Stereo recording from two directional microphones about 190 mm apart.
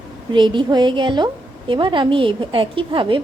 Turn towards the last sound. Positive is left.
turn(degrees=-25)  # may be behind; listen again after turning